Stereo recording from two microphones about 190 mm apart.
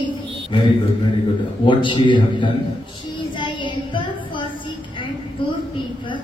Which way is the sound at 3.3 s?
25° left (ahead or behind).